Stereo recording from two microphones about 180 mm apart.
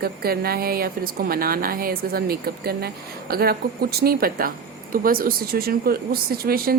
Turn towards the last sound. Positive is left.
turn(degrees=-55)  # may be behind; listen again after turning